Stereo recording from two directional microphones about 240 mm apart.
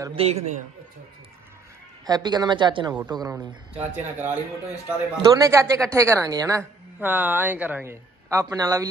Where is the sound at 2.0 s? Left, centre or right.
Centre.